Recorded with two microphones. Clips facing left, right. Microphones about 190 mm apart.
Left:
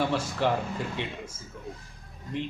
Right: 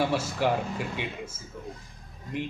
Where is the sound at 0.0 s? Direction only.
10° right (ahead or behind).